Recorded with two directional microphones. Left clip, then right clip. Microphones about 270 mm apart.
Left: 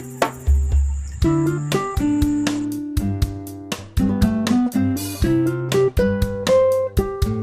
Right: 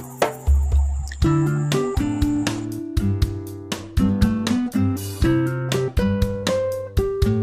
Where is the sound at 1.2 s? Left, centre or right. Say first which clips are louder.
Left 2 dB; centre.